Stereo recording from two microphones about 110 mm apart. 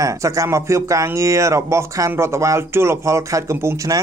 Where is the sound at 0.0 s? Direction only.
30° right (ahead or behind).